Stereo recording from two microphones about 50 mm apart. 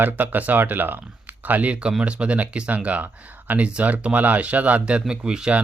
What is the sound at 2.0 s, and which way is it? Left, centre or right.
Speech, right.